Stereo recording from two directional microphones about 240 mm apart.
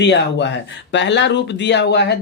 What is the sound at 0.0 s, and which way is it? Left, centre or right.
Speech, left.